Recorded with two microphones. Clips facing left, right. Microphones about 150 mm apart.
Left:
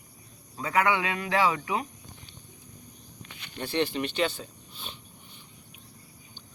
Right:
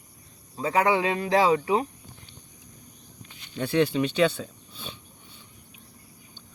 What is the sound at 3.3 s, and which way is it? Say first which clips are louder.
Walk: left 3 dB; 75° left (ahead or behind).